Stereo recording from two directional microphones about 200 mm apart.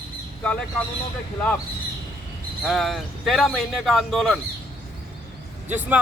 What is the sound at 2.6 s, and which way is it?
A man's voice, centre (ahead or behind).